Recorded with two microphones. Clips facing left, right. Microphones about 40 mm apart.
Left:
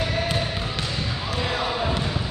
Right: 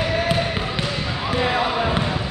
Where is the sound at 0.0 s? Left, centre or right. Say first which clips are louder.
Right 4 dB; right.